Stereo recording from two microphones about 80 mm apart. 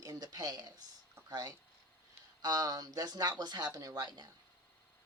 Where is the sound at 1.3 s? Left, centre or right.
Right.